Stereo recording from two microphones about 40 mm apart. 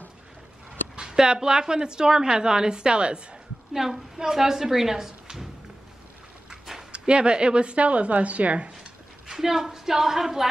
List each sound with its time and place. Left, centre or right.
0.9 s a woman's voice: centre
3.7 s a woman's voice: centre
6.9 s a woman's voice: right
9.3 s a woman's voice: centre